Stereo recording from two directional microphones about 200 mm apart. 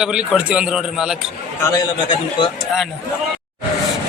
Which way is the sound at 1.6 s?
20° left (ahead or behind).